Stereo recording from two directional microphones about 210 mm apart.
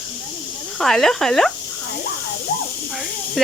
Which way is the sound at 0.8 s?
Centre (ahead or behind).